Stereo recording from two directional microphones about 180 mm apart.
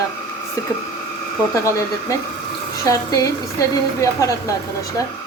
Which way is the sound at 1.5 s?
15° left (ahead or behind).